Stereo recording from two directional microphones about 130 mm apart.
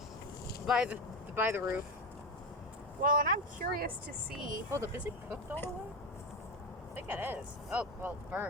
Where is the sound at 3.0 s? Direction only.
90° right.